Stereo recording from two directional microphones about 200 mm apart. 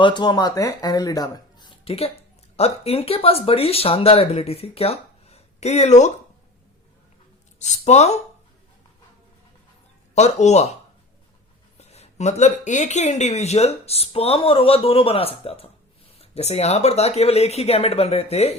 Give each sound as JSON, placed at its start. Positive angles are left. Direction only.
{"t": 0.0, "sound": "speech", "side_deg": 20}
{"t": 7.6, "sound": "speech", "side_deg": 35}
{"t": 10.2, "sound": "speech", "side_deg": 35}
{"t": 11.8, "sound": "speech", "side_deg": 35}